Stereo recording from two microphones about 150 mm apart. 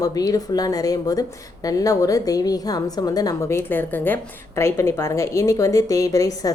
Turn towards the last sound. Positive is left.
turn(degrees=20)  # may be behind; listen again after turning